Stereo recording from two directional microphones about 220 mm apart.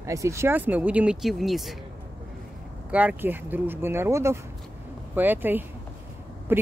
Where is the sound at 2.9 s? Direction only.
5° right (ahead or behind).